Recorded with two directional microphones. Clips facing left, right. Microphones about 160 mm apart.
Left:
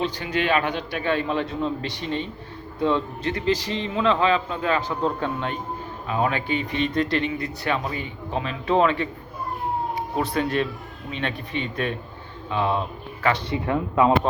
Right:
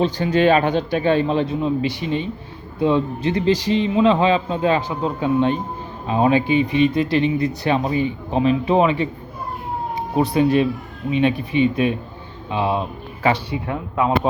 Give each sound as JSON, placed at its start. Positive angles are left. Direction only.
{"t": 0.3, "sound": "a man's voice", "side_deg": -35}
{"t": 1.5, "sound": "a man's voice", "side_deg": -10}
{"t": 4.9, "sound": "speech", "side_deg": -10}
{"t": 6.1, "sound": "speech", "side_deg": -25}
{"t": 7.2, "sound": "a man's voice", "side_deg": -20}